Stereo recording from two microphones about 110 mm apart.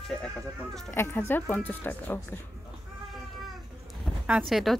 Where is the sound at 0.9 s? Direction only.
20° left (ahead or behind).